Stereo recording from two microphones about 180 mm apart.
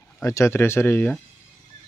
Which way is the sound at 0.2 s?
15° left (ahead or behind).